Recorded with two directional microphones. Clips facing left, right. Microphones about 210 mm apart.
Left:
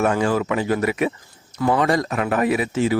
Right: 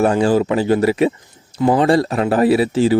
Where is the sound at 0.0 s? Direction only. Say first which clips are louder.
Right 5 dB; 30° right (ahead or behind).